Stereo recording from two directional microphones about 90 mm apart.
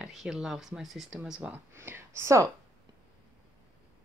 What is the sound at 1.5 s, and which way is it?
Speech, 25° right (ahead or behind).